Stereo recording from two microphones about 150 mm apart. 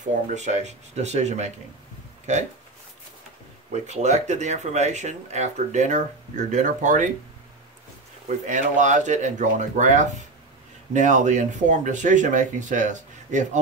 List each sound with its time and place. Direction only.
0.3 s speech: 50° right (ahead or behind)
3.7 s speech: 50° right (ahead or behind)
8.5 s speech: 55° right (ahead or behind)